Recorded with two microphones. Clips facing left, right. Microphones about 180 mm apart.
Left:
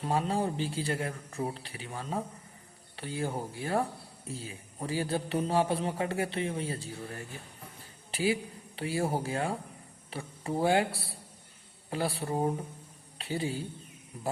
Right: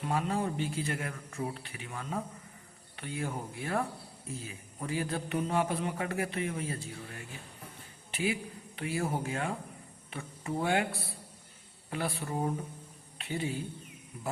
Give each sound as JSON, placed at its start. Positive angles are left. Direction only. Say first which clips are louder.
{"t": 0.0, "sound": "a man's voice", "louder": "left 2 dB", "side_deg": 30}